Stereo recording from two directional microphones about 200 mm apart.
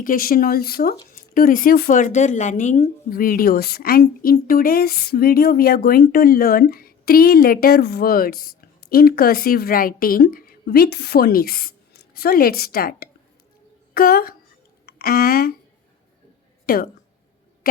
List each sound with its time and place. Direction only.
0.0 s speech: 45° left (ahead or behind)
16.6 s a woman's voice: 50° left (ahead or behind)